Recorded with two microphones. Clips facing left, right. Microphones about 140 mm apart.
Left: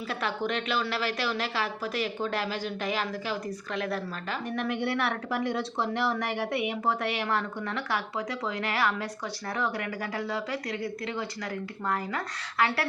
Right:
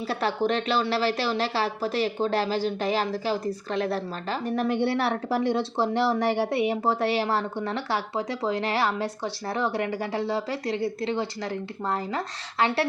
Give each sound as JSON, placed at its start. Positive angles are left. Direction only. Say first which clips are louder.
{"t": 0.1, "sound": "a woman's voice", "louder": "right 6 dB", "side_deg": -35}